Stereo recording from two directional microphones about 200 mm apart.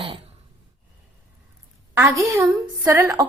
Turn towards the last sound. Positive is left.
turn(degrees=-15)  # may be behind; listen again after turning